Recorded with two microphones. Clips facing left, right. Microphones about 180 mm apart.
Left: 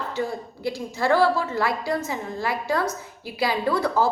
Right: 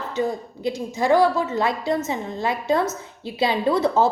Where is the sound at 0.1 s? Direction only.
20° right (ahead or behind).